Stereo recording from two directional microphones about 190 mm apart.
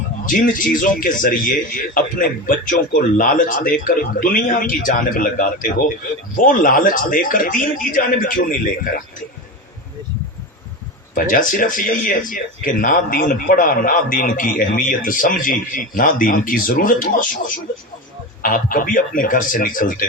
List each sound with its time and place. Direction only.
0.3 s a man's voice: 45° left (ahead or behind)
11.1 s a man's voice: 45° left (ahead or behind)